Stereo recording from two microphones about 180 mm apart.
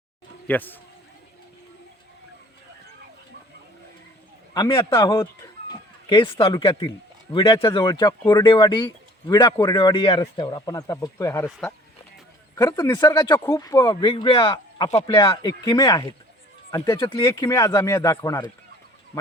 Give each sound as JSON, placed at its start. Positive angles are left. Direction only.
{"t": 0.4, "sound": "speech", "side_deg": 10}
{"t": 4.5, "sound": "a man's voice", "side_deg": 15}
{"t": 12.5, "sound": "speech", "side_deg": 15}